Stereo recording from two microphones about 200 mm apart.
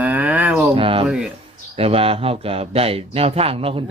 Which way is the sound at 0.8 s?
25° right (ahead or behind).